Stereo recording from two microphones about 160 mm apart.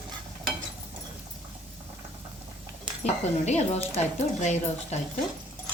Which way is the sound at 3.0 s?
45° left (ahead or behind).